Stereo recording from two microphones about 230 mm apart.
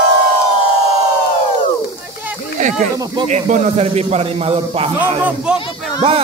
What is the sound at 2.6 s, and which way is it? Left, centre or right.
A man's voice, right.